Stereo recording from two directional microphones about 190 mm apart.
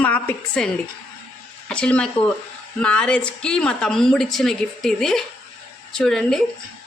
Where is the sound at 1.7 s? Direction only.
5° left (ahead or behind).